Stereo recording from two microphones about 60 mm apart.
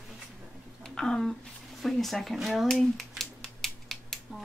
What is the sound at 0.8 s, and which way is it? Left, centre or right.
A woman's voice, centre.